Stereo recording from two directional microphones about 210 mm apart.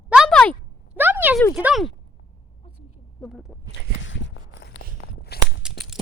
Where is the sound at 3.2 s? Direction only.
Centre (ahead or behind).